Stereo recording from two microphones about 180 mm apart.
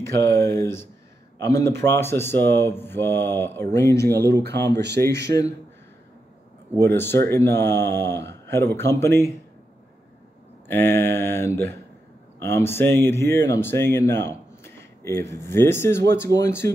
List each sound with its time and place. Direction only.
0.0 s speech: 15° left (ahead or behind)
4.3 s speech: 65° right (ahead or behind)
5.3 s speech: 55° right (ahead or behind)
6.8 s speech: 10° left (ahead or behind)
10.7 s speech: 10° left (ahead or behind)